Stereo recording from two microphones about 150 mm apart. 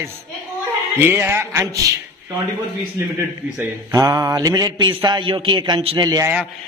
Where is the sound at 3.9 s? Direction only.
25° right (ahead or behind).